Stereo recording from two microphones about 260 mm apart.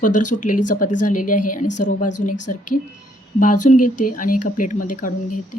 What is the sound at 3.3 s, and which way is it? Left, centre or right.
Speech, left.